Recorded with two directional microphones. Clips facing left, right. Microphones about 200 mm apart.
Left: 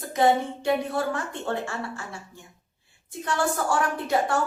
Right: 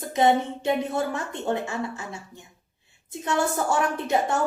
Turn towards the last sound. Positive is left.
turn(degrees=-20)  # may be behind; listen again after turning